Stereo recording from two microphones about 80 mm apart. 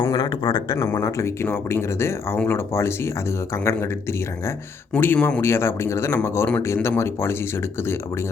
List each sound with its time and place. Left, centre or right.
0.0 s speech: left
0.8 s speech: left
4.9 s speech: left